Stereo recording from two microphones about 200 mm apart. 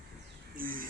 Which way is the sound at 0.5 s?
45° right (ahead or behind).